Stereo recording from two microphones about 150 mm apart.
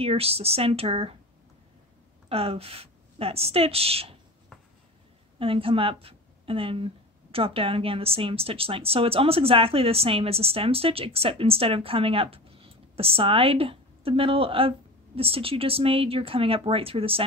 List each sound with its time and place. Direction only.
0.0 s a woman's voice: 40° right (ahead or behind)
2.2 s a woman's voice: 40° right (ahead or behind)
5.4 s a woman's voice: 35° right (ahead or behind)